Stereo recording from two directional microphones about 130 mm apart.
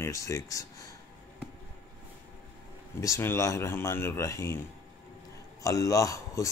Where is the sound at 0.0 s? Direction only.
25° left (ahead or behind).